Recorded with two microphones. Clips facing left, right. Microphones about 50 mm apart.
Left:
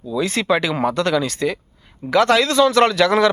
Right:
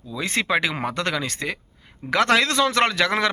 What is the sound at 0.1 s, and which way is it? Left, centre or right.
Speech, right.